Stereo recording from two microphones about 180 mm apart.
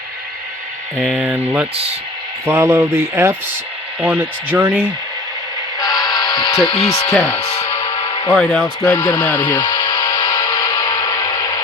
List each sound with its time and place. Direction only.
0.9 s speech: centre (ahead or behind)
2.5 s speech: 15° right (ahead or behind)
5.8 s music: 20° left (ahead or behind)
6.7 s speech: 25° left (ahead or behind)
7.0 s speech: 10° left (ahead or behind)
7.6 s music: 15° left (ahead or behind)
7.9 s a sound: 30° left (ahead or behind)
8.3 s speech: 5° left (ahead or behind)
9.7 s music: 20° left (ahead or behind)